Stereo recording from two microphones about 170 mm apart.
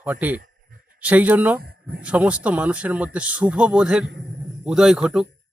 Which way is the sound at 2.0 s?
10° right (ahead or behind).